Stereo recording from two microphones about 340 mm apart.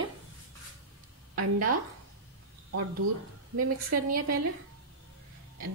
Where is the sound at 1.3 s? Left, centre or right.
Right.